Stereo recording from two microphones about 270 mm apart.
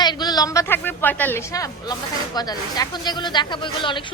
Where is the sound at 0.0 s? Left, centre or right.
Centre.